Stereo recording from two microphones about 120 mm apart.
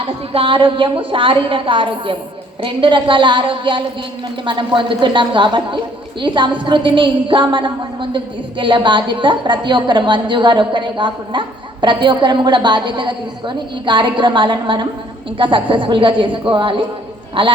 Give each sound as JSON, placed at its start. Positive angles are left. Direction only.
{"t": 0.3, "sound": "a woman's voice", "side_deg": -45}